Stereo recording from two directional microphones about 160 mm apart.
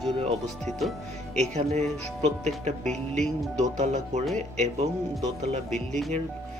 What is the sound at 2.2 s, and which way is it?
Speech, 45° right (ahead or behind).